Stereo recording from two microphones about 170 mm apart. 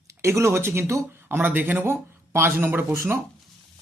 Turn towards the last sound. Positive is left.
turn(degrees=-15)  # may be behind; listen again after turning